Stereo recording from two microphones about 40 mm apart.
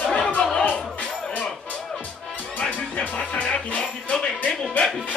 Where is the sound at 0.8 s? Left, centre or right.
Left.